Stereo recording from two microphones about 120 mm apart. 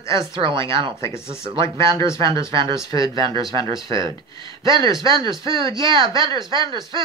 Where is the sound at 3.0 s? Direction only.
40° right (ahead or behind).